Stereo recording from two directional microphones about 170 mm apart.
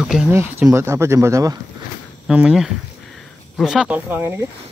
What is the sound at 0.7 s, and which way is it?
Speech, 15° right (ahead or behind).